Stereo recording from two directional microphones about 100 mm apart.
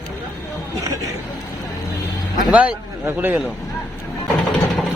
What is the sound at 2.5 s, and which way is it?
Speech, 15° right (ahead or behind).